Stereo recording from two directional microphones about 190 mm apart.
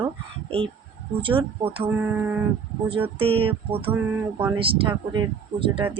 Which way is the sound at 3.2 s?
30° right (ahead or behind).